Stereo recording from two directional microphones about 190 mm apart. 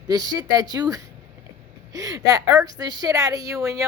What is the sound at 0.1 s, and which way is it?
A woman's voice, 20° right (ahead or behind).